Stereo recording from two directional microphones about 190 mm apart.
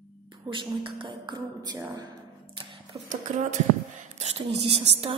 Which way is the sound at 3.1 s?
40° right (ahead or behind).